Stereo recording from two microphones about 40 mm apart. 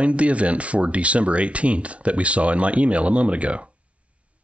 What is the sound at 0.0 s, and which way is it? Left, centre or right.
Speech, right.